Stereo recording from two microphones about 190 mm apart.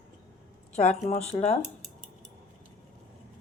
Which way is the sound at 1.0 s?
40° left (ahead or behind).